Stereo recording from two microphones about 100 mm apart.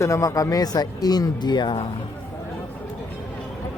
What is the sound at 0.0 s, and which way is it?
Speech, 35° left (ahead or behind).